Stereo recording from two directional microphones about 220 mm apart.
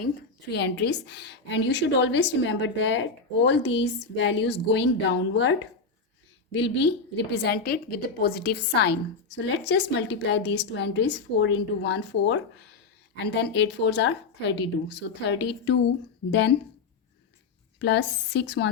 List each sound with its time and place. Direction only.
0.5 s a woman's voice: 50° left (ahead or behind)
17.7 s a woman's voice: 50° left (ahead or behind)